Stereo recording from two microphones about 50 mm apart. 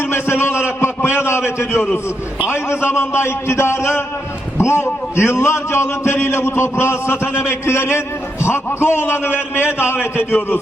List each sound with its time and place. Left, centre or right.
0.1 s a man's voice: left